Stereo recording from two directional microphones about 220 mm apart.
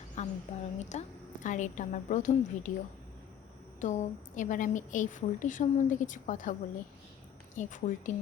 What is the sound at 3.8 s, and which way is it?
Speech, 35° left (ahead or behind).